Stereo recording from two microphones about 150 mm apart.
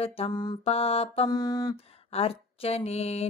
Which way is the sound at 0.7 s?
40° left (ahead or behind).